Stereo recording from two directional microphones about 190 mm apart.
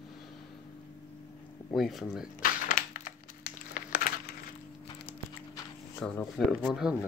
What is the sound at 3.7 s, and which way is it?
Crumpling, 45° left (ahead or behind).